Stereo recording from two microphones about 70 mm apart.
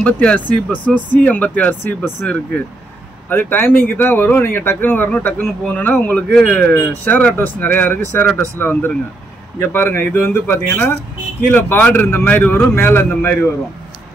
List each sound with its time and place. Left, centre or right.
0.0 s speech: centre
3.3 s speech: left
6.3 s speech: centre
6.9 s speech: left